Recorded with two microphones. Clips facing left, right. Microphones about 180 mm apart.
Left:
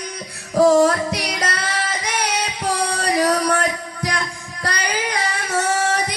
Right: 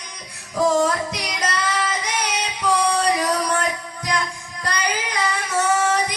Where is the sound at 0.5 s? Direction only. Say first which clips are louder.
Left 6 dB; 35° left (ahead or behind).